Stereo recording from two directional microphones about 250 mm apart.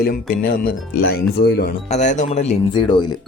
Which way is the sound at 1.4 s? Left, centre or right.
Left.